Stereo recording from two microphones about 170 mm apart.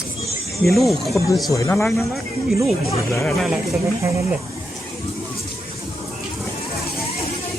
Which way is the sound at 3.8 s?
15° right (ahead or behind).